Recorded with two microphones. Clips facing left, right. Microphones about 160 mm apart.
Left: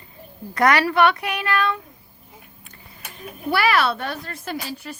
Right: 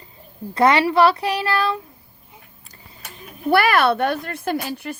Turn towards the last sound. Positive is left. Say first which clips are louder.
# right 6 dB
turn(degrees=-55)  # may be behind; listen again after turning